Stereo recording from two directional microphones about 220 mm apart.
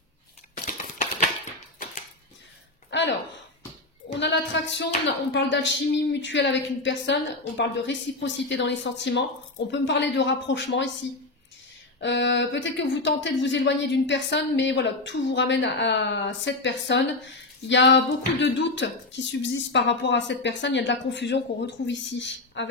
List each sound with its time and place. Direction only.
2.9 s a sound: 55° left (ahead or behind)
4.2 s speech: 55° left (ahead or behind)
12.0 s speech: 55° left (ahead or behind)